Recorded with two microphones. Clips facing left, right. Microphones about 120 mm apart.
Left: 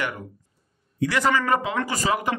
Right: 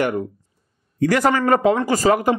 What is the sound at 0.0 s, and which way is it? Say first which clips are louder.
Speech: right 9 dB; 40° right (ahead or behind).